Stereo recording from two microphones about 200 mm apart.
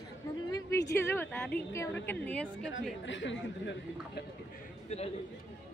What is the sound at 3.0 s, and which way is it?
A woman's voice, 65° left (ahead or behind).